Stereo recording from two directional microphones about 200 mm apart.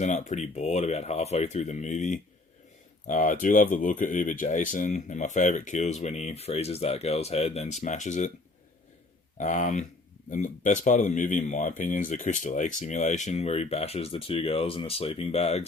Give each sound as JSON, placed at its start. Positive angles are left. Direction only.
{"t": 0.0, "sound": "speech", "side_deg": 35}
{"t": 9.4, "sound": "speech", "side_deg": 40}